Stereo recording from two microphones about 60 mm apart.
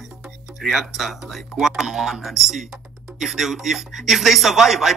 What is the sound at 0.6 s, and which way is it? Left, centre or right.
Speech, centre.